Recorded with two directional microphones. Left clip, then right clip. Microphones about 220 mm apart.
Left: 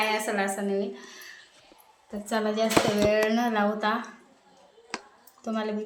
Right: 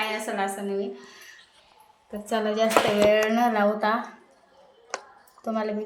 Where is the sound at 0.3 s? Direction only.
10° left (ahead or behind).